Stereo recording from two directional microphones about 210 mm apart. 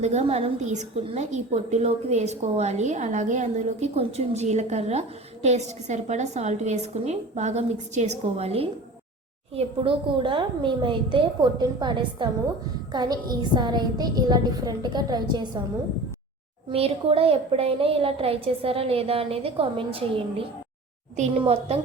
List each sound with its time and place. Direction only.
0.0 s a woman's voice: 30° right (ahead or behind)
16.7 s a woman's voice: 30° right (ahead or behind)
21.2 s a woman's voice: 25° right (ahead or behind)